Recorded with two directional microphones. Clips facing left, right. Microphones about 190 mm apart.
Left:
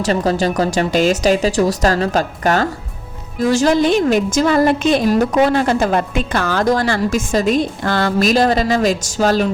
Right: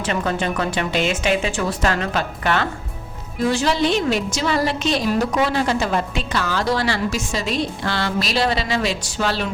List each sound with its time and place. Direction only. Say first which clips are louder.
0.0 s a woman's voice: left 6 dB; 35° left (ahead or behind)